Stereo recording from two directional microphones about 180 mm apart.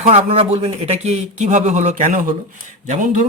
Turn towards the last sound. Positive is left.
turn(degrees=-45)  # may be behind; listen again after turning